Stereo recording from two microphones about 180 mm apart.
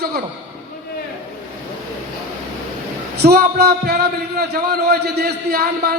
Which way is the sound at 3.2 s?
60° right (ahead or behind).